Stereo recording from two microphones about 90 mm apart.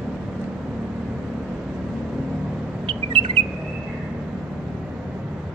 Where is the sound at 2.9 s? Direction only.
70° right (ahead or behind).